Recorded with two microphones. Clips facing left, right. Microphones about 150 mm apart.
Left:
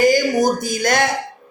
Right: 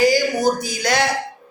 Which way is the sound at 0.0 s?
45° left (ahead or behind).